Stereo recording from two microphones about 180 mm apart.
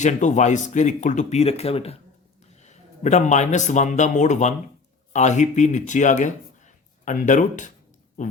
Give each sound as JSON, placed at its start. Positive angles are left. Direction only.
{"t": 0.0, "sound": "a man's voice", "side_deg": 40}